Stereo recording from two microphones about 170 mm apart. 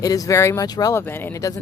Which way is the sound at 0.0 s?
20° left (ahead or behind).